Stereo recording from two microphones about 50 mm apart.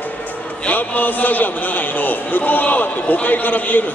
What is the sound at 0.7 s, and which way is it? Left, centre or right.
A man's voice, left.